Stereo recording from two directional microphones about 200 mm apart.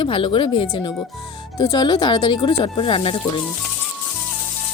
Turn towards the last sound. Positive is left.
turn(degrees=25)  # may be behind; listen again after turning